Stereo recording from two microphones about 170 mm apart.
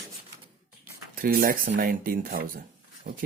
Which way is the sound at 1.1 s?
55° right (ahead or behind).